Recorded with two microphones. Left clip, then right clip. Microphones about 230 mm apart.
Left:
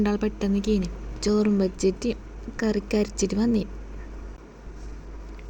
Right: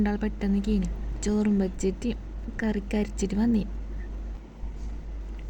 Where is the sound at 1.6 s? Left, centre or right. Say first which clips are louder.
Left 5 dB; centre.